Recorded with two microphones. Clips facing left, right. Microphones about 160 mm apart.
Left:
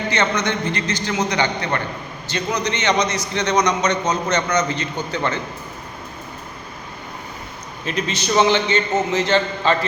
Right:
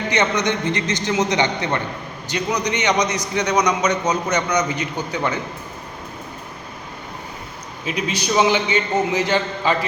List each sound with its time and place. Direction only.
0.1 s a man's voice: 15° right (ahead or behind)
7.9 s a man's voice: 10° right (ahead or behind)